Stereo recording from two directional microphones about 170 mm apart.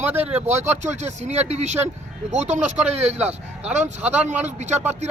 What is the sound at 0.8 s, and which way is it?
Speech, 40° right (ahead or behind).